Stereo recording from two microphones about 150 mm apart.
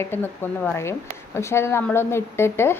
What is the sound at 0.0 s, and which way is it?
A woman's voice, 15° left (ahead or behind).